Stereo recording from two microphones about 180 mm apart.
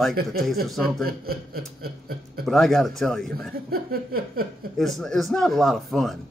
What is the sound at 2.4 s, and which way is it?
Speech, centre (ahead or behind).